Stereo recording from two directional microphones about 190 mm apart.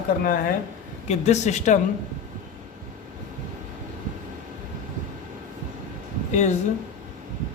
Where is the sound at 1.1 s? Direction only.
35° left (ahead or behind).